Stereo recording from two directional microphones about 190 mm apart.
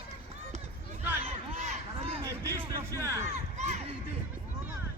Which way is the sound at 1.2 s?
35° right (ahead or behind).